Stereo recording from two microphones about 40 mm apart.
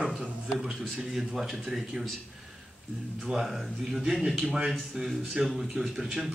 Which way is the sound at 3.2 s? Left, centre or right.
Centre.